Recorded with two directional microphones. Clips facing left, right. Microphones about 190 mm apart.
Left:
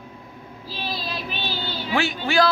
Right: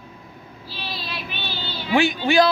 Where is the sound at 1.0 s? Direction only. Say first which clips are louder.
Left 2 dB; 40° left (ahead or behind).